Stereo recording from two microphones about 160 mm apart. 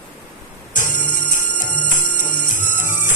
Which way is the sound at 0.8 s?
55° left (ahead or behind).